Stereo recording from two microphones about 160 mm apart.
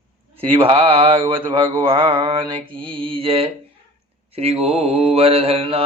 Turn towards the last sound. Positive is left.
turn(degrees=-35)  # may be behind; listen again after turning